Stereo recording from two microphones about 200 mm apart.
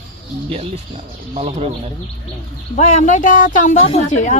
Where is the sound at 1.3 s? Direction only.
30° right (ahead or behind).